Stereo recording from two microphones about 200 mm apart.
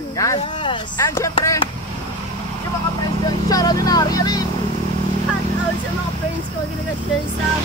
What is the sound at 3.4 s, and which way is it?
Speech, 20° left (ahead or behind).